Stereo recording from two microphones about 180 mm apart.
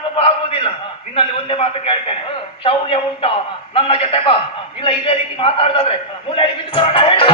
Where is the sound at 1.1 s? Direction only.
30° left (ahead or behind).